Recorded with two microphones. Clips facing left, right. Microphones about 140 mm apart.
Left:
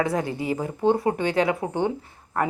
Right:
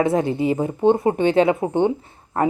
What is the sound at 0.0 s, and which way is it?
Speech, 25° right (ahead or behind).